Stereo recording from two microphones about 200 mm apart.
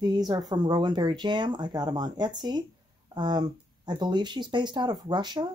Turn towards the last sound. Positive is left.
turn(degrees=-20)  # may be behind; listen again after turning